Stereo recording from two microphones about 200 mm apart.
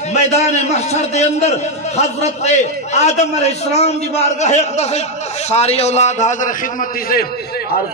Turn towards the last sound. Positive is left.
turn(degrees=45)  # may be behind; listen again after turning